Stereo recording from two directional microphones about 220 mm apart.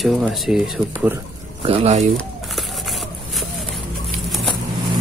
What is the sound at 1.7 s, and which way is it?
Speech, 30° right (ahead or behind).